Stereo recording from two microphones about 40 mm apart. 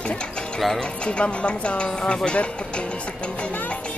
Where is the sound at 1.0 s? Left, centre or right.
Left.